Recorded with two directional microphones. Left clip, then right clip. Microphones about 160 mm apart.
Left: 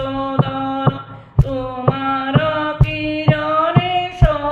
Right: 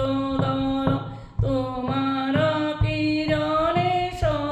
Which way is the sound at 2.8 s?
15° right (ahead or behind).